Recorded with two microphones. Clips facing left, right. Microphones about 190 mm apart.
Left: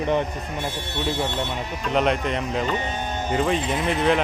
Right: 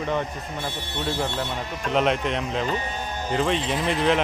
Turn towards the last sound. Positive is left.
turn(degrees=0)  # may be behind; listen again after turning